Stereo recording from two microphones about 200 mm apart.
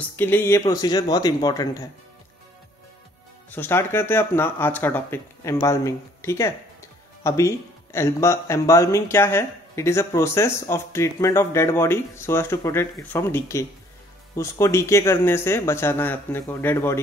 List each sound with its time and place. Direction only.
0.0 s speech: 10° left (ahead or behind)
3.4 s speech: 10° left (ahead or behind)